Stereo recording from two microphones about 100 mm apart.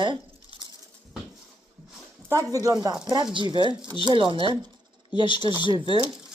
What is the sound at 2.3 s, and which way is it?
Speech, 35° right (ahead or behind).